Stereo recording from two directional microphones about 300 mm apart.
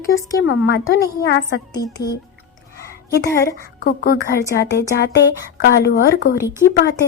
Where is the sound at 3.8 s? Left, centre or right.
Left.